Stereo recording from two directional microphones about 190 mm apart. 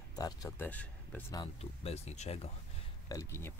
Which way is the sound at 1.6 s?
35° left (ahead or behind).